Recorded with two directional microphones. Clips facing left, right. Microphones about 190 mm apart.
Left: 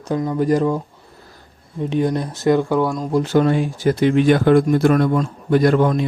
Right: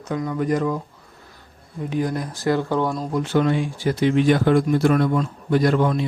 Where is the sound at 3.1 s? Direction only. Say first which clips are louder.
Left 5 dB; 35° left (ahead or behind).